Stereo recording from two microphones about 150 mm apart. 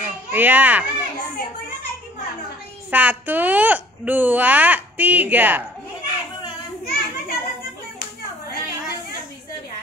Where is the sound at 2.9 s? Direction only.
10° right (ahead or behind).